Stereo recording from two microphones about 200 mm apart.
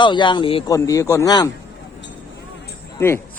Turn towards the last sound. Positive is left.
turn(degrees=10)  # may be behind; listen again after turning